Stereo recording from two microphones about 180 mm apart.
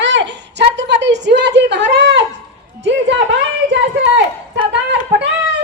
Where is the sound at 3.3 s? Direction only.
75° right (ahead or behind).